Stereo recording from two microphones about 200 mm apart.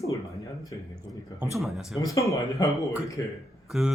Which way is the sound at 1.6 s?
Centre (ahead or behind).